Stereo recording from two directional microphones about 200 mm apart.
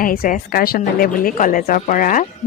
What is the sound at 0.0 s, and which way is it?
A woman's voice, 45° left (ahead or behind).